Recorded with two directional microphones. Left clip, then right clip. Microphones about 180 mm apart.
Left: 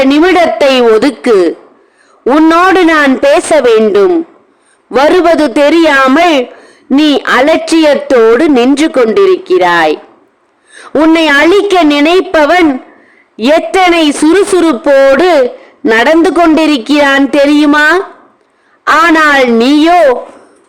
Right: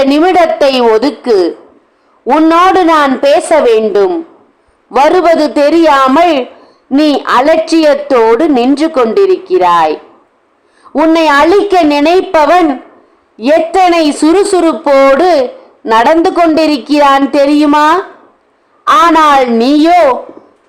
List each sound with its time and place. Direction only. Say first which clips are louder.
0.0 s a woman's voice: left 1 dB; 35° left (ahead or behind)
19.1 s a woman's voice: even; 25° left (ahead or behind)